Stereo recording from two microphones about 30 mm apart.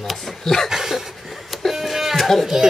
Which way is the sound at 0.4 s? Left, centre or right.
Centre.